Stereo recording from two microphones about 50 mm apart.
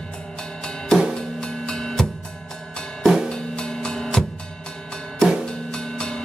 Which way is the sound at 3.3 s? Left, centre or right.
Centre.